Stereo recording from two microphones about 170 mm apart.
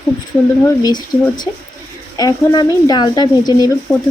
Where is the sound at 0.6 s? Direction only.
25° left (ahead or behind).